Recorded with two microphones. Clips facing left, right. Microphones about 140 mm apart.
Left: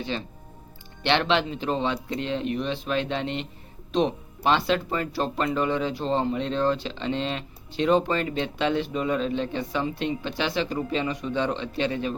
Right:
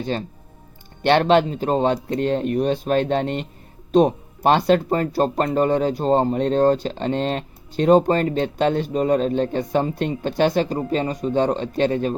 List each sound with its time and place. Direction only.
0.0 s speech: 45° right (ahead or behind)